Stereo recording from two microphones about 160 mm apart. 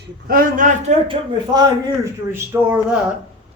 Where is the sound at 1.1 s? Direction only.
25° right (ahead or behind).